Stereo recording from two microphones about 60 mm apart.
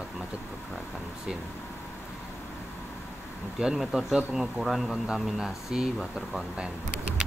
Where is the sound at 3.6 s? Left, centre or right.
Centre.